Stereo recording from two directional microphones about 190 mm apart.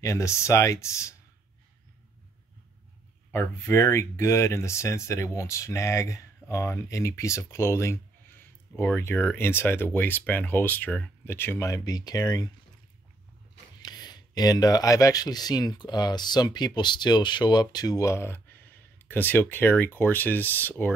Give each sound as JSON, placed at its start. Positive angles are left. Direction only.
{"t": 0.0, "sound": "speech", "side_deg": 15}
{"t": 3.3, "sound": "speech", "side_deg": 15}
{"t": 13.8, "sound": "speech", "side_deg": 20}